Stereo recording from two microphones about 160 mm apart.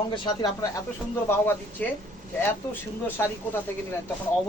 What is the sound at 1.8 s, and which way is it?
Speech, 10° left (ahead or behind).